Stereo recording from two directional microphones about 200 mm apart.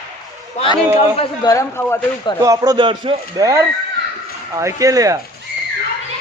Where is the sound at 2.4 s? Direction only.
15° right (ahead or behind).